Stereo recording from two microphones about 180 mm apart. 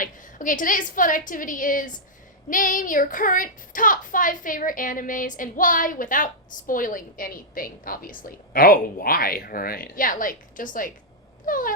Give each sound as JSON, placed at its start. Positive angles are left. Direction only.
{"t": 0.0, "sound": "a woman's voice", "side_deg": 45}